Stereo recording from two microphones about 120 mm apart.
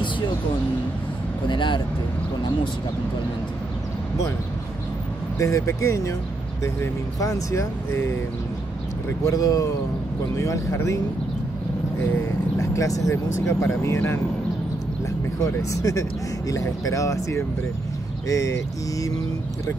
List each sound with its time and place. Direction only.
1.5 s speech: 40° left (ahead or behind)
5.4 s speech: 25° left (ahead or behind)
9.2 s speech: 30° left (ahead or behind)
12.0 s speech: 25° left (ahead or behind)
15.4 s speech: 30° left (ahead or behind)